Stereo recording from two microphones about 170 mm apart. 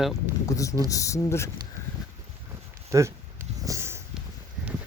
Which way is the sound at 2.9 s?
15° right (ahead or behind).